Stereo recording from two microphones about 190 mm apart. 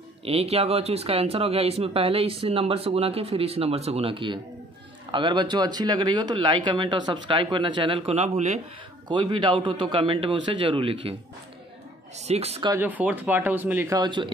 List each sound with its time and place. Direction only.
0.2 s speech: 30° right (ahead or behind)
12.2 s speech: 35° right (ahead or behind)
12.6 s speech: 10° right (ahead or behind)